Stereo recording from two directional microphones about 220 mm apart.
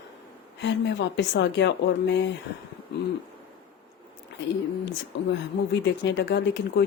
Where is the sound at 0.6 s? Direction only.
55° left (ahead or behind).